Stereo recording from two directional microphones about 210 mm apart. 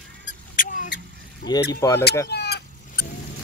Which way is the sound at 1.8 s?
15° left (ahead or behind).